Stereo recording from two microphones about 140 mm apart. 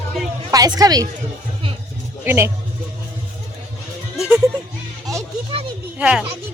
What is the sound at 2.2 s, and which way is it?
Speech, 20° right (ahead or behind).